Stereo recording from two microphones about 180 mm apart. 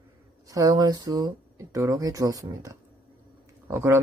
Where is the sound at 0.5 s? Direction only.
20° right (ahead or behind).